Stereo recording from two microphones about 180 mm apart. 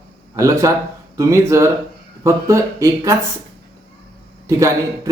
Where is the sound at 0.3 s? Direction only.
15° right (ahead or behind).